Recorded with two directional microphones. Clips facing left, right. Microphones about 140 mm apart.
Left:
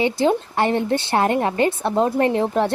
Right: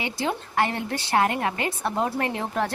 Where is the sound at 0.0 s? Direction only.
30° left (ahead or behind).